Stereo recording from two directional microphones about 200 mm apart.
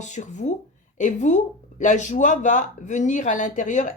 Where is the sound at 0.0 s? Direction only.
35° left (ahead or behind).